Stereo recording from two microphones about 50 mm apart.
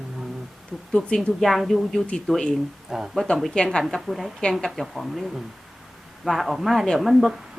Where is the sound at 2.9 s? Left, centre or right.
Centre.